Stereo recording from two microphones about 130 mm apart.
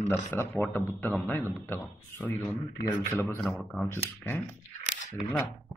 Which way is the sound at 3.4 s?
Centre (ahead or behind).